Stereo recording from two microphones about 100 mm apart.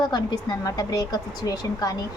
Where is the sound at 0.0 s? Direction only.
45° left (ahead or behind).